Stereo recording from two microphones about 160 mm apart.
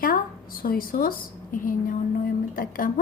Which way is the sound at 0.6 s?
65° left (ahead or behind).